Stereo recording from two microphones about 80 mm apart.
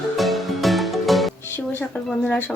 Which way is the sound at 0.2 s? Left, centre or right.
Centre.